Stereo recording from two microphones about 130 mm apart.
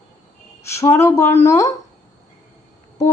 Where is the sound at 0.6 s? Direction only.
20° left (ahead or behind).